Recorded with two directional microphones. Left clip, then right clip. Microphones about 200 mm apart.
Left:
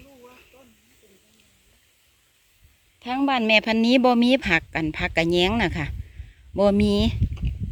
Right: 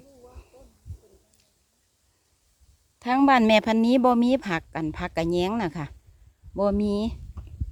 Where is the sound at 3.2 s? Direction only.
30° right (ahead or behind).